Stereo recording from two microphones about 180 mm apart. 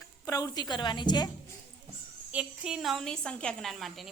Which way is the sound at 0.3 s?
20° left (ahead or behind).